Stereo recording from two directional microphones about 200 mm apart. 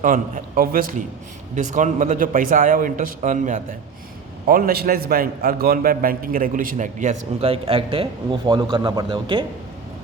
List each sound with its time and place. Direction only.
0.0 s a man's voice: 40° right (ahead or behind); by 9.4 s 25° right (ahead or behind)